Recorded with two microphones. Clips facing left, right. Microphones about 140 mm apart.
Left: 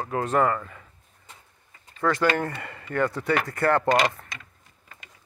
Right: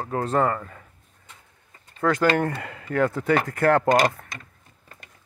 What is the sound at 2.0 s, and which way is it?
Speech, 50° right (ahead or behind).